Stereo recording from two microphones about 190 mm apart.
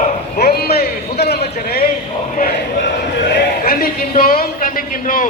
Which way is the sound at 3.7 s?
50° left (ahead or behind).